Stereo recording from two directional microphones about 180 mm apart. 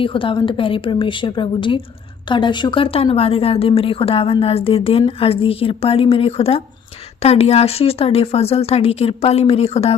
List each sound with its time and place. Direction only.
0.0 s a woman's voice: 30° left (ahead or behind)